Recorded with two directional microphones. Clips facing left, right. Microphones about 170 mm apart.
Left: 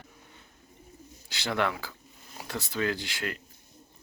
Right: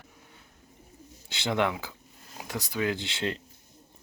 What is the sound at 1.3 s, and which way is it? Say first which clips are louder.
Speech: right 2 dB; 20° right (ahead or behind).